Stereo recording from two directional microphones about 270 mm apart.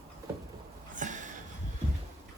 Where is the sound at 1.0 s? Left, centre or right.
Right.